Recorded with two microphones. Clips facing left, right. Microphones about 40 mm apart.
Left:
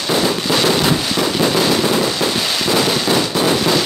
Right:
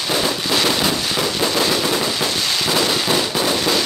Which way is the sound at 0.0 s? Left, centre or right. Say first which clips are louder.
Left 3 dB; centre.